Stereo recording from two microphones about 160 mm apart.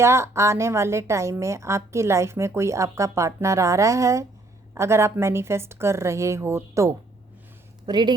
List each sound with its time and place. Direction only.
0.0 s a woman's voice: 15° right (ahead or behind)
7.9 s speech: 25° right (ahead or behind)